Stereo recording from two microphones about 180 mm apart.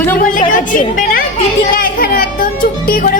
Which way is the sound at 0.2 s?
45° left (ahead or behind).